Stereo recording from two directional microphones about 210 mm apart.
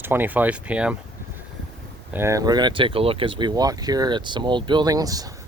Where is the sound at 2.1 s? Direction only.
15° right (ahead or behind).